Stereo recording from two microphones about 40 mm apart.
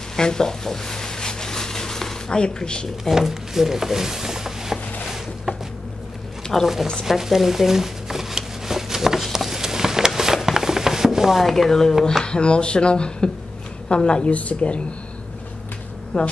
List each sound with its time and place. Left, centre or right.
0.1 s a sound: centre
3.1 s speech: centre
5.0 s a sound: centre
6.5 s speech: centre
7.1 s shuffling cards: centre
11.1 s chopping: centre
11.4 s speech: centre
12.0 s speech: centre
12.4 s a woman's voice: left
16.1 s speech: left